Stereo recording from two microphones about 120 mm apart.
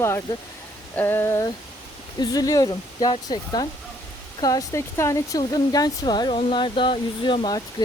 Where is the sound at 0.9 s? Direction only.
20° left (ahead or behind).